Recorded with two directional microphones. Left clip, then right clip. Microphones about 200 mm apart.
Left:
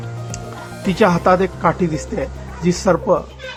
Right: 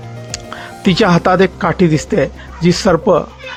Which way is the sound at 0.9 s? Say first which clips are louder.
Right 2 dB; 25° right (ahead or behind).